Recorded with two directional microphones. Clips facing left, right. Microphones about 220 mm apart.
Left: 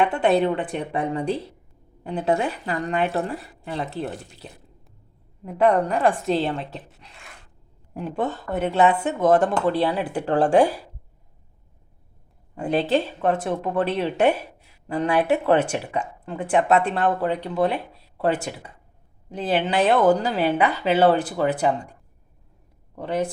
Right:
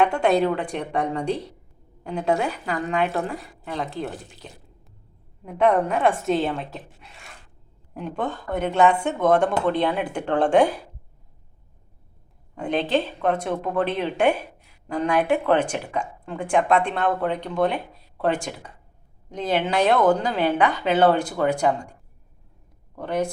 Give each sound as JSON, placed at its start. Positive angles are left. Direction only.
{"t": 0.0, "sound": "speech", "side_deg": 5}
{"t": 5.5, "sound": "speech", "side_deg": 0}
{"t": 12.5, "sound": "speech", "side_deg": 5}
{"t": 23.0, "sound": "speech", "side_deg": 5}